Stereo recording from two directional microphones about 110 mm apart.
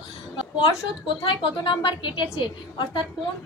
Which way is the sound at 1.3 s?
45° left (ahead or behind).